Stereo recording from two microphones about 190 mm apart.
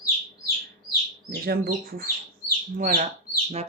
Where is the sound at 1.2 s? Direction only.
50° right (ahead or behind).